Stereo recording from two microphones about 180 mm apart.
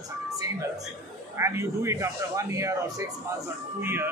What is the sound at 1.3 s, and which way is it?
A man's voice, 15° right (ahead or behind).